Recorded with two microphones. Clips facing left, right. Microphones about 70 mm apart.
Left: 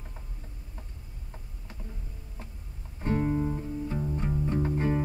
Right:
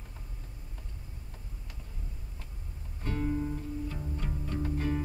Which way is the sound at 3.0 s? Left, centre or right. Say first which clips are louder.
Left 5 dB; left.